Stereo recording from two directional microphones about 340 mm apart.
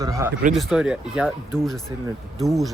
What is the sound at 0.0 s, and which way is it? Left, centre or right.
Speech, centre.